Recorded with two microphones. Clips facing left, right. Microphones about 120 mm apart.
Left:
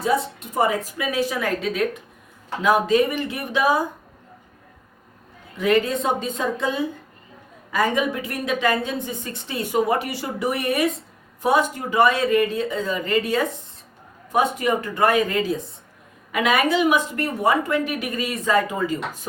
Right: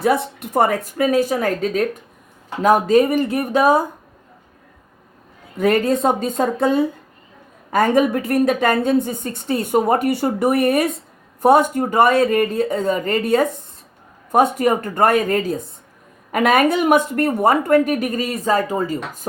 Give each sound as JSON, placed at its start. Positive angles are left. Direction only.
{"t": 0.0, "sound": "speech", "side_deg": -60}
{"t": 5.5, "sound": "speech", "side_deg": -45}